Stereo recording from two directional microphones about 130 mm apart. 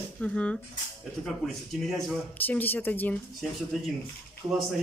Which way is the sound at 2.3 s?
15° left (ahead or behind).